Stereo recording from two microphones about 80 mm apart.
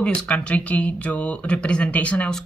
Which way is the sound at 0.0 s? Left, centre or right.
Centre.